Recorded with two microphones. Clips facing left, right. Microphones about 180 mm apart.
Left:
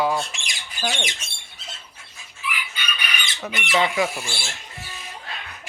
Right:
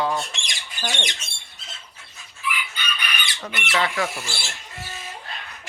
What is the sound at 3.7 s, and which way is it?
Speech, 15° left (ahead or behind).